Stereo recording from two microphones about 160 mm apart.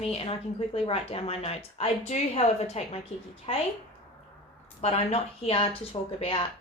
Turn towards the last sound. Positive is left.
turn(degrees=35)  # may be behind; listen again after turning